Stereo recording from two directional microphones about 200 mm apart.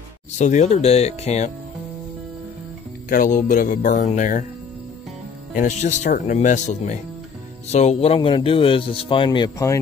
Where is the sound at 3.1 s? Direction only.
40° left (ahead or behind).